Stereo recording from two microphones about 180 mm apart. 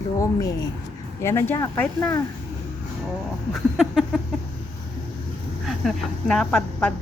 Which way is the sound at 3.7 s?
Centre (ahead or behind).